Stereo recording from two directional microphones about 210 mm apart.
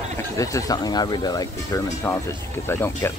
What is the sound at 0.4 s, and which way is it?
Speech, 15° left (ahead or behind).